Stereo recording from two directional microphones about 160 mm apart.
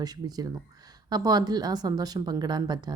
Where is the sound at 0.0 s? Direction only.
25° right (ahead or behind).